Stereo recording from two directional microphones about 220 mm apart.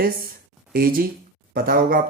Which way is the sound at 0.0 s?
40° right (ahead or behind).